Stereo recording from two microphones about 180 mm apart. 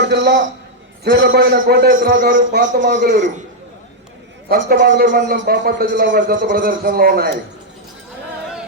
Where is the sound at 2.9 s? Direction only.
70° right (ahead or behind).